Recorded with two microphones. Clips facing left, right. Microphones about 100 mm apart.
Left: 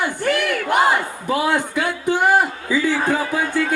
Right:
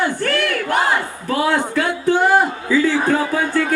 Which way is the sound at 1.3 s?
15° left (ahead or behind).